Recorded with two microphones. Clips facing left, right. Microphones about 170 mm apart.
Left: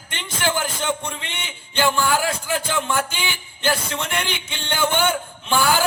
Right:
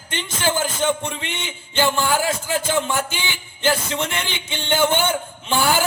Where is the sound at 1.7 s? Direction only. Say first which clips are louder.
Even; 20° right (ahead or behind).